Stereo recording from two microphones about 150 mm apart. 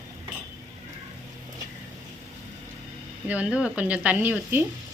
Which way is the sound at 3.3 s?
10° right (ahead or behind).